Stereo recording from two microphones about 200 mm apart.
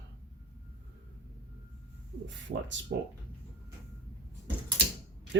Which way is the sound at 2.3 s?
65° right (ahead or behind).